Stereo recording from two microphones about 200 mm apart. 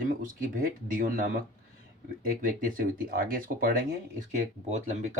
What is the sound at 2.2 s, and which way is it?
Speech, 45° right (ahead or behind).